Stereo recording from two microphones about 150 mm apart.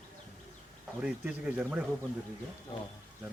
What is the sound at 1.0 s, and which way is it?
Speech, 5° right (ahead or behind).